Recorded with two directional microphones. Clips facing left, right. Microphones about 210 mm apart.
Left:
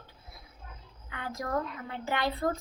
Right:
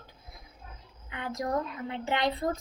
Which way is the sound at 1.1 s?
20° right (ahead or behind).